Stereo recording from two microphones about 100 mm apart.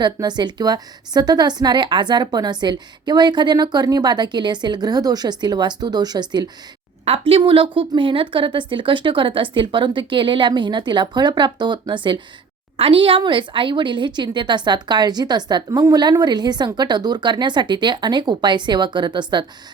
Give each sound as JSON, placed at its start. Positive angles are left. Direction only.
{"t": 0.0, "sound": "speech", "side_deg": -45}
{"t": 7.0, "sound": "a woman's voice", "side_deg": -80}
{"t": 12.7, "sound": "speech", "side_deg": -65}